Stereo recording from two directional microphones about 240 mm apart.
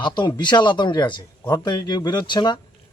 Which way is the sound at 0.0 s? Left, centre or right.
Centre.